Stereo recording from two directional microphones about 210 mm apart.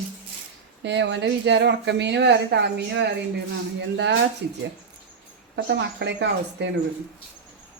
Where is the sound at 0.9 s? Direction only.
60° right (ahead or behind).